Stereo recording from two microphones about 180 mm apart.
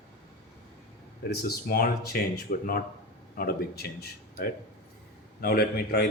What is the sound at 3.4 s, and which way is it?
A man's voice, 55° left (ahead or behind).